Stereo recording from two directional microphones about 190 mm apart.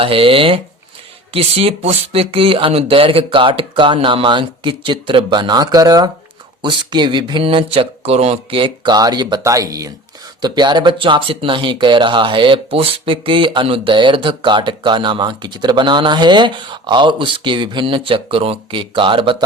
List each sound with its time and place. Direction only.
0.0 s speech: 30° right (ahead or behind)